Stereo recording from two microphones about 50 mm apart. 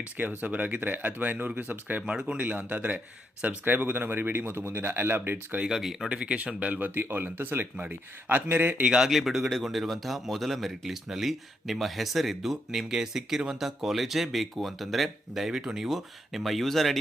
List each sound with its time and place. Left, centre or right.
0.0 s speech: right
2.0 s speech: centre
2.4 s speech: right
5.7 s a man's voice: centre
6.1 s speech: right
7.0 s speech: right
7.8 s speech: right
8.8 s speech: centre
9.0 s a man's voice: centre